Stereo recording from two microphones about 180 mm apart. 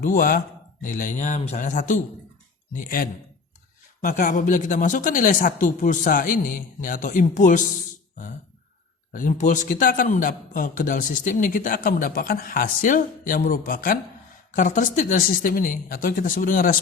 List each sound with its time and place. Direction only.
0.0 s a man's voice: 50° left (ahead or behind)
9.1 s a man's voice: 45° left (ahead or behind)